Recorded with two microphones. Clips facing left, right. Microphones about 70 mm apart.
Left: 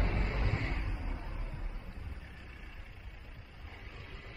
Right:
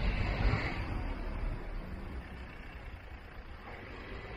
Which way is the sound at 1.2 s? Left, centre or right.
Right.